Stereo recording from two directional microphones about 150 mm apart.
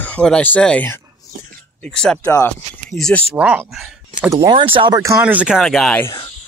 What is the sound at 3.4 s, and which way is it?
Speech, 10° right (ahead or behind).